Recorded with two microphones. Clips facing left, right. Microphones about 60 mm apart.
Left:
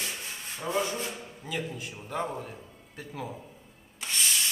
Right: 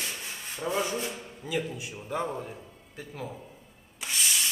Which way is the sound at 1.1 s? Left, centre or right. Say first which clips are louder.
Right 3 dB; centre.